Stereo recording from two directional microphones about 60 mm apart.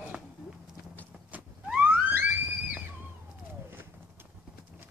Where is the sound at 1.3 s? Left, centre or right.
Right.